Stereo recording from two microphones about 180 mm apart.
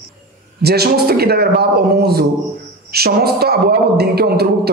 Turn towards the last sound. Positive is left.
turn(degrees=-60)  # may be behind; listen again after turning